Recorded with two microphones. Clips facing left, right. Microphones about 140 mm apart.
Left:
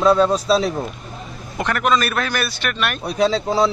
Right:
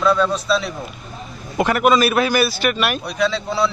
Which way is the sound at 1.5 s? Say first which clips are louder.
Right 4 dB; 10° right (ahead or behind).